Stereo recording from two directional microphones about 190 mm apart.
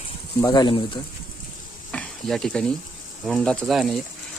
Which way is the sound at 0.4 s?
20° left (ahead or behind).